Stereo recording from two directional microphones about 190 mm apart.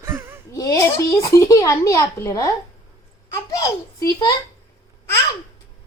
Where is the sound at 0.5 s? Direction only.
20° left (ahead or behind).